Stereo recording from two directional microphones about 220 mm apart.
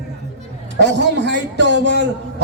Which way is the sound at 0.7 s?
50° right (ahead or behind).